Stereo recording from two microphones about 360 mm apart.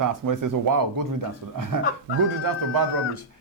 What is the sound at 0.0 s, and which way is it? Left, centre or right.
Speech, right.